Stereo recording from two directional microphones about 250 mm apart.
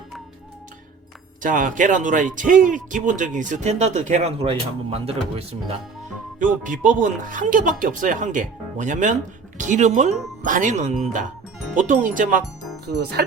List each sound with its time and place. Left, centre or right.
1.4 s speech: right